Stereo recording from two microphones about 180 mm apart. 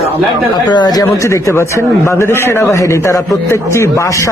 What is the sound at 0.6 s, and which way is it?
Speech, 25° left (ahead or behind).